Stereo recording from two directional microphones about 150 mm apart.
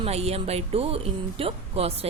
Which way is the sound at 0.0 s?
45° right (ahead or behind).